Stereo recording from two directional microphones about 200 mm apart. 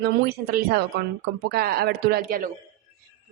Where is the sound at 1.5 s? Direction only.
50° right (ahead or behind).